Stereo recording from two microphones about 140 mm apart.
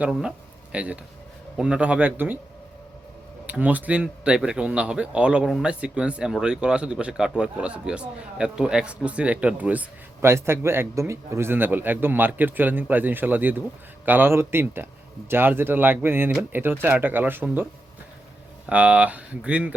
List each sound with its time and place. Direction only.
0.0 s speech: 5° right (ahead or behind)
3.4 s speech: 10° right (ahead or behind)